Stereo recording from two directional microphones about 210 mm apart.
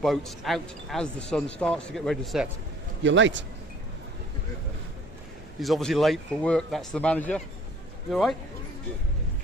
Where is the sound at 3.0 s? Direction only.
60° right (ahead or behind).